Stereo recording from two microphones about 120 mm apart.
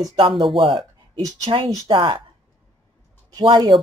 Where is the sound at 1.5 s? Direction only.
50° right (ahead or behind).